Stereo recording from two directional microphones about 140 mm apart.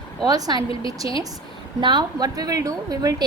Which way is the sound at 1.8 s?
35° right (ahead or behind).